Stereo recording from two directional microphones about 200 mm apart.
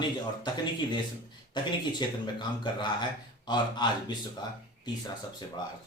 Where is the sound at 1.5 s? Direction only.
20° left (ahead or behind).